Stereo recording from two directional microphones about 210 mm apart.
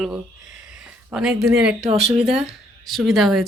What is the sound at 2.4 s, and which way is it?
Speech, centre (ahead or behind).